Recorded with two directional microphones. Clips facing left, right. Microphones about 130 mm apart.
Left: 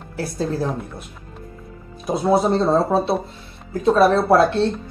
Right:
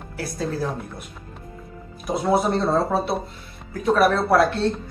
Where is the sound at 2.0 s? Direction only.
25° left (ahead or behind).